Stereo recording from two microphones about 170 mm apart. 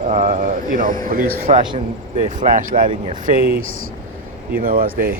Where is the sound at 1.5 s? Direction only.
30° right (ahead or behind).